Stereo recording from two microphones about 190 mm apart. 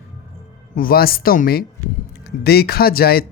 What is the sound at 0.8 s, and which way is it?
Speech, 50° left (ahead or behind).